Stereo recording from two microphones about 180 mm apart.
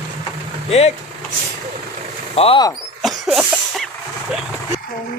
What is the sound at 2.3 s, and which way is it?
Speech, 30° left (ahead or behind).